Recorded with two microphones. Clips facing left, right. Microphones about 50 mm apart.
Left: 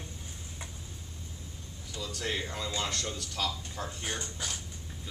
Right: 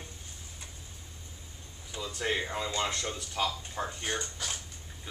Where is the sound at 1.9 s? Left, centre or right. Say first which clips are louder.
Right 3 dB; right.